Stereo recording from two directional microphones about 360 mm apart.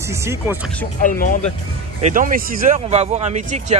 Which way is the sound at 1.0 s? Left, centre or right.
Left.